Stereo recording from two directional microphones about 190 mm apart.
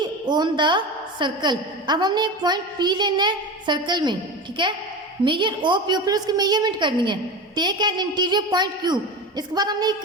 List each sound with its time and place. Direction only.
0.0 s a woman's voice: 25° right (ahead or behind)